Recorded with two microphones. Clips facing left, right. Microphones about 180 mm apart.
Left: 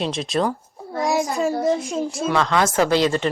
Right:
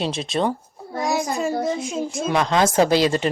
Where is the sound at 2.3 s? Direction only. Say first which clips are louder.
Right 2 dB; 20° right (ahead or behind).